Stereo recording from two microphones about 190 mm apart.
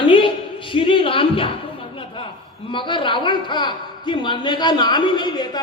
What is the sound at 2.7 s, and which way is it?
A man's voice, 25° left (ahead or behind).